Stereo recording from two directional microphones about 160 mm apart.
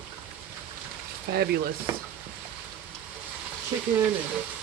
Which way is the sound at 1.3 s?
90° right.